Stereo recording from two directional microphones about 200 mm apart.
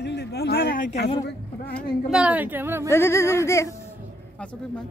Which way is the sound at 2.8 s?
15° left (ahead or behind).